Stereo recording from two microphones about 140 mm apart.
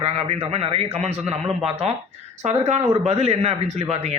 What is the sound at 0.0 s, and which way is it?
Speech, 45° right (ahead or behind).